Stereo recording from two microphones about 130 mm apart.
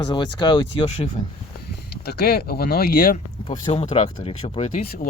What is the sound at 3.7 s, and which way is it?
Speech, 55° left (ahead or behind).